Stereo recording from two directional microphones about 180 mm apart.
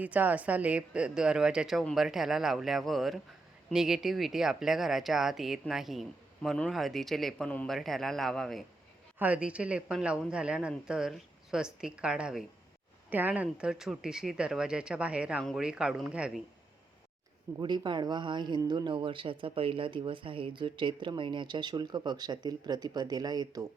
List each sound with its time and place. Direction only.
0.0 s speech: 10° right (ahead or behind)
9.1 s speech: 10° right (ahead or behind)
17.6 s speech: 25° right (ahead or behind)